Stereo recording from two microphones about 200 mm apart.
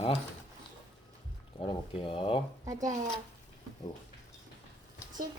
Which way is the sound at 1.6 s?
25° left (ahead or behind).